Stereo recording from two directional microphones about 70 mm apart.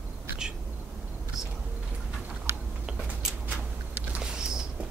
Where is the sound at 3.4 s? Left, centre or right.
Right.